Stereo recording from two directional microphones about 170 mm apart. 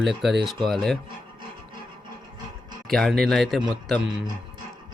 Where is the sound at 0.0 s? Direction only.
Centre (ahead or behind).